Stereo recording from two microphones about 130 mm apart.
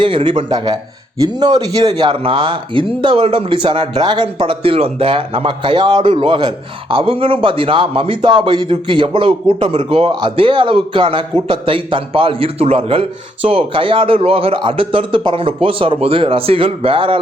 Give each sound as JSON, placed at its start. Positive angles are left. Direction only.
{"t": 0.0, "sound": "speech", "side_deg": -45}
{"t": 1.9, "sound": "a man's voice", "side_deg": -45}